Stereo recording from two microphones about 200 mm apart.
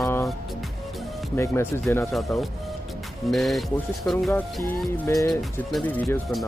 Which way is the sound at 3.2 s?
Centre (ahead or behind).